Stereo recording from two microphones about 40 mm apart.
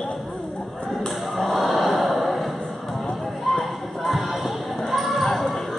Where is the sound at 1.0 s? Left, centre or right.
Centre.